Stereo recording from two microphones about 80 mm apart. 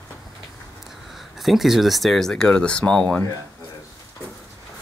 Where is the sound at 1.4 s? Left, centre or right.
Centre.